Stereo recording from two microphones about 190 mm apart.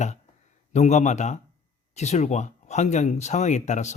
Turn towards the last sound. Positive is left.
turn(degrees=40)  # may be behind; listen again after turning